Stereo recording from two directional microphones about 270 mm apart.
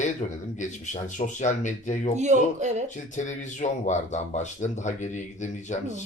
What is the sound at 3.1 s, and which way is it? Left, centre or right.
Speech, left.